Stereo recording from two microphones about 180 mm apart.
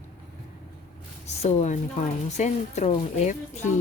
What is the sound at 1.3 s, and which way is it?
A woman's voice, 35° left (ahead or behind).